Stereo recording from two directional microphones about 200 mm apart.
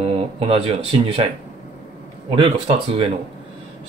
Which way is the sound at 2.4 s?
25° right (ahead or behind).